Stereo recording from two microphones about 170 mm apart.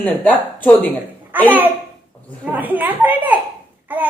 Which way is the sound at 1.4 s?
10° right (ahead or behind).